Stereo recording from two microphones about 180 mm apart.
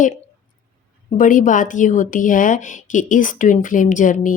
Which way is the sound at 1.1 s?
45° left (ahead or behind).